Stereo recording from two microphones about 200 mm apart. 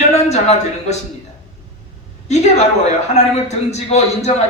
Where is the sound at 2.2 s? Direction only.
35° left (ahead or behind).